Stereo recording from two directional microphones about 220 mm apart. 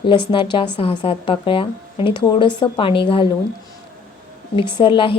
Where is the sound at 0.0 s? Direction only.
25° left (ahead or behind).